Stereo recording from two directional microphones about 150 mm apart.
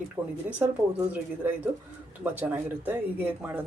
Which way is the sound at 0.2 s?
15° right (ahead or behind).